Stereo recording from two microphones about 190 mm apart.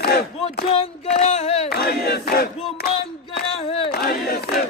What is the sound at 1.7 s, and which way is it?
Battle cry, 60° left (ahead or behind).